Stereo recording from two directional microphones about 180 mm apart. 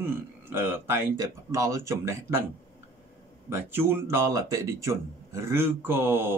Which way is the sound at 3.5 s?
10° right (ahead or behind).